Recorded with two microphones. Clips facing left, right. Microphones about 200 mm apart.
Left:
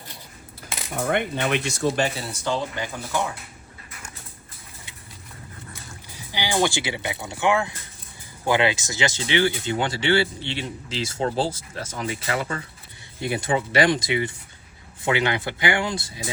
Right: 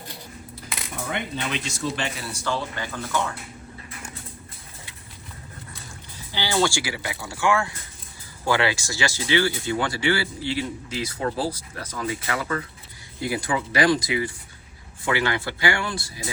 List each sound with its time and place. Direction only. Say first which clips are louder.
1.0 s speech: left 6 dB; 55° left (ahead or behind); by 2.2 s 40° left (ahead or behind)
2.4 s speech: left 2 dB; 15° left (ahead or behind)
6.1 s speech: even; 15° left (ahead or behind)